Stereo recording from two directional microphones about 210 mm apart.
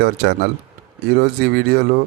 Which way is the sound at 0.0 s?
50° right (ahead or behind).